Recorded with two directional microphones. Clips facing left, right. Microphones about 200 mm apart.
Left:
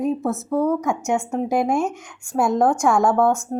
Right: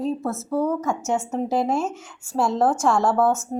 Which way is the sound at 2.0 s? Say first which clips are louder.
Left 1 dB; 5° right (ahead or behind).